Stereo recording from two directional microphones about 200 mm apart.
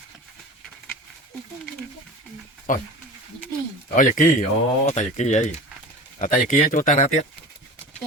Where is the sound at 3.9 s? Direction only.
40° left (ahead or behind).